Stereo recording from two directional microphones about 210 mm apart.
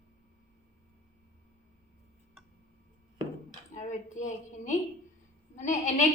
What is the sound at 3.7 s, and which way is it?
A woman's voice, 35° left (ahead or behind).